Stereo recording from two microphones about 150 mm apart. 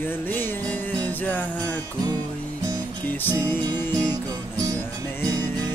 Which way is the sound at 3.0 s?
15° left (ahead or behind).